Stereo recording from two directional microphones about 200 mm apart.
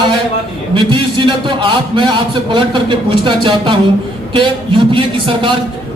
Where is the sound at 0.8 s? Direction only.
25° right (ahead or behind).